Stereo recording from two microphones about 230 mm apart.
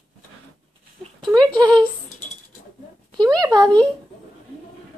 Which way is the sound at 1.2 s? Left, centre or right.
Centre.